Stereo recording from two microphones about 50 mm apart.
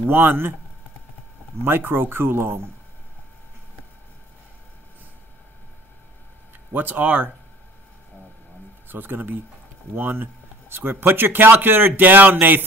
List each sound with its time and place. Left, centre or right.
0.0 s speech: right
1.6 s speech: right
6.7 s speech: right
8.8 s speech: right